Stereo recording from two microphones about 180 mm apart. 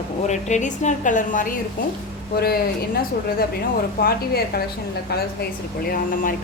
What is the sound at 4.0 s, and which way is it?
A woman's voice, 55° left (ahead or behind).